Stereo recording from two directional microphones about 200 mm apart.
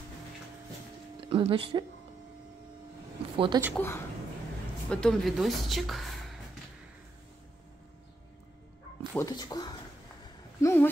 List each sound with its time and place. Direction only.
1.2 s speech: 25° right (ahead or behind)
3.3 s a woman's voice: 25° right (ahead or behind)
3.7 s a woman's voice: 15° left (ahead or behind)
9.1 s speech: 20° left (ahead or behind)